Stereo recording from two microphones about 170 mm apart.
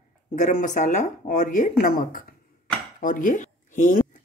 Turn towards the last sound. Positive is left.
turn(degrees=50)  # may be behind; listen again after turning